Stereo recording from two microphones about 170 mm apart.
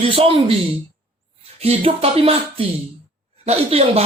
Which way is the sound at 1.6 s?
35° right (ahead or behind).